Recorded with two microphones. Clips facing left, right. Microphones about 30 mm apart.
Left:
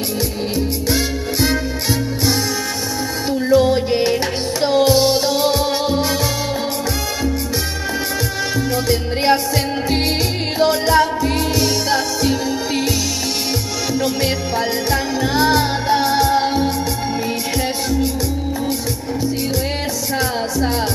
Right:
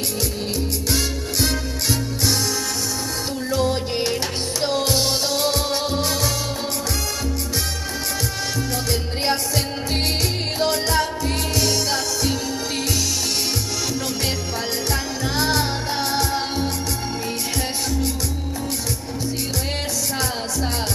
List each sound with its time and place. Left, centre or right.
0.8 s music: centre
3.4 s music: centre
8.8 s music: centre
10.6 s music: centre
13.9 s music: centre
20.2 s music: centre